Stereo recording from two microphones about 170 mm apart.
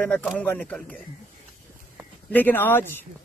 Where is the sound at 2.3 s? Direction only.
10° left (ahead or behind).